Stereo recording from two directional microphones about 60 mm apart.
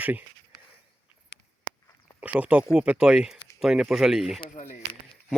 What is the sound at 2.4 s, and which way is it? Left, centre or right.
Speech, right.